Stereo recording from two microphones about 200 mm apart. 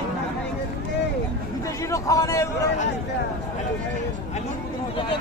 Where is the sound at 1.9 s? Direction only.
15° left (ahead or behind).